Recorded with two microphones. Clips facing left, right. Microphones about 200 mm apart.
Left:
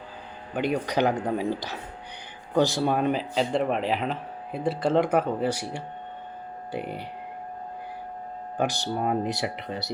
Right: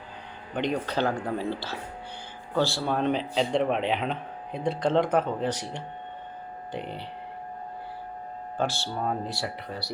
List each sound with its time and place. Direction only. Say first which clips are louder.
0.5 s speech: left 2 dB; 10° left (ahead or behind)
8.5 s speech: left 3 dB; 15° left (ahead or behind)